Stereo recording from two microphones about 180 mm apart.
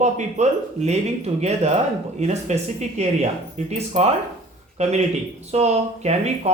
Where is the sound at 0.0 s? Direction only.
40° right (ahead or behind).